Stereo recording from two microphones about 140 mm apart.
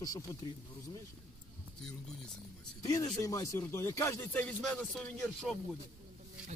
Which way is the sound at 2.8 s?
30° left (ahead or behind).